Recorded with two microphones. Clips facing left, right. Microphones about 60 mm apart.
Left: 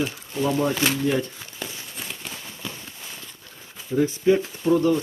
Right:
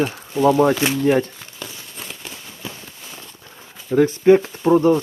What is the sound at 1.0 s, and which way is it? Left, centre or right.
Speech, right.